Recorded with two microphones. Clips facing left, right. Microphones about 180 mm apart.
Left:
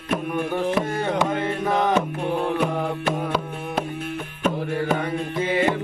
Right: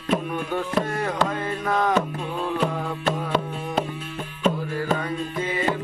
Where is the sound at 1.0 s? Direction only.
25° left (ahead or behind).